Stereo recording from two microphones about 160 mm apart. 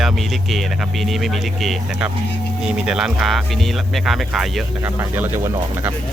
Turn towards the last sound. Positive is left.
turn(degrees=-15)  # may be behind; listen again after turning